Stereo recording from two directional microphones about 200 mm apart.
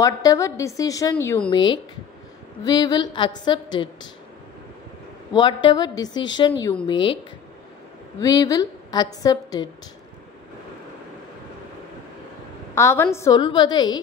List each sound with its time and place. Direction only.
0.0 s a woman's voice: 15° left (ahead or behind)
5.3 s a woman's voice: 25° left (ahead or behind)
8.2 s a woman's voice: 20° left (ahead or behind)
12.7 s a woman's voice: 15° left (ahead or behind)